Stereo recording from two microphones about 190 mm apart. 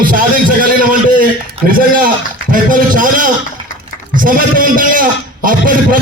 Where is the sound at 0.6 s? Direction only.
45° right (ahead or behind).